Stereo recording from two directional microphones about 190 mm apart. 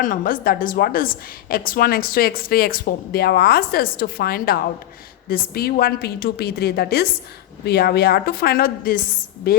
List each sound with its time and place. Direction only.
0.0 s a woman's voice: 45° left (ahead or behind)